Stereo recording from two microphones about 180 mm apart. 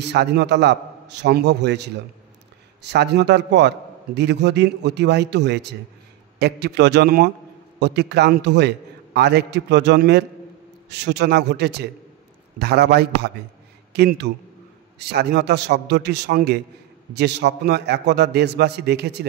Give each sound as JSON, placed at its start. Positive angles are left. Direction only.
{"t": 0.0, "sound": "a man's voice", "side_deg": -65}